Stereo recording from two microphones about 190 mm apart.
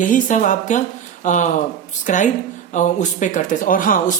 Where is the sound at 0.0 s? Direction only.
45° left (ahead or behind).